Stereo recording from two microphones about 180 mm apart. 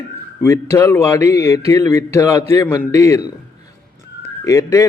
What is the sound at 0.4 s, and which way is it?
A man's voice, 15° left (ahead or behind).